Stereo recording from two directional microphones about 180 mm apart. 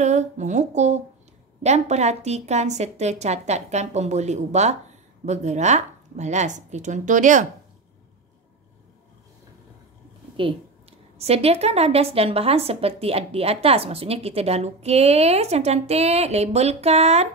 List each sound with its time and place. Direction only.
0.0 s a woman's voice: 40° right (ahead or behind)
11.1 s a woman's voice: 35° right (ahead or behind)